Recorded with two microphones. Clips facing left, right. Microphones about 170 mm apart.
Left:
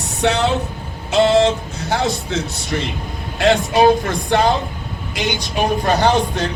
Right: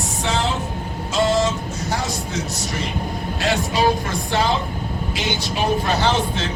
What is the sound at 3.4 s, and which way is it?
Speech, 55° left (ahead or behind).